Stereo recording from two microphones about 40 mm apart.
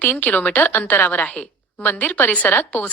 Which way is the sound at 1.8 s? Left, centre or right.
Left.